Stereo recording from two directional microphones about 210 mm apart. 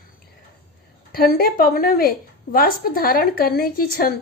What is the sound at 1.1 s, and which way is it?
A woman's voice, 45° left (ahead or behind).